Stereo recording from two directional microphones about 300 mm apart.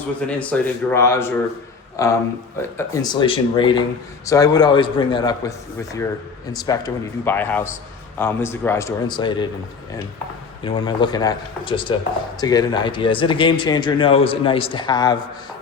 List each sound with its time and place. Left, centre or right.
0.3 s speech: centre
10.6 s speech: centre